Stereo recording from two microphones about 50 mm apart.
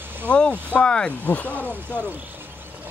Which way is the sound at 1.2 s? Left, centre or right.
Left.